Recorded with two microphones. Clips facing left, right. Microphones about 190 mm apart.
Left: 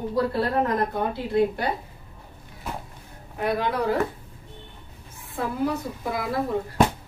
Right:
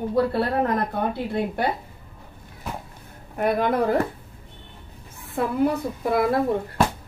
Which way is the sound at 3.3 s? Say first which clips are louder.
Right 4 dB; 50° right (ahead or behind).